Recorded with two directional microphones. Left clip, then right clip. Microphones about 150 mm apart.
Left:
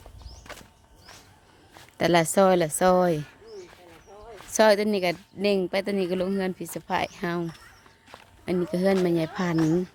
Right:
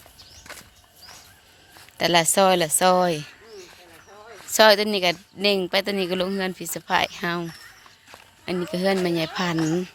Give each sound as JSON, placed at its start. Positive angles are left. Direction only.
{"t": 0.5, "sound": "walk", "side_deg": -5}
{"t": 2.0, "sound": "speech", "side_deg": 30}
{"t": 4.4, "sound": "speech", "side_deg": 10}